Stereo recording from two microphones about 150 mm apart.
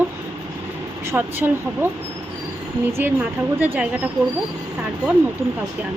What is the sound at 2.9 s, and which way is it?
Speech, 15° right (ahead or behind).